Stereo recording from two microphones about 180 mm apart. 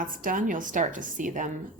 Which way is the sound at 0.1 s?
50° right (ahead or behind).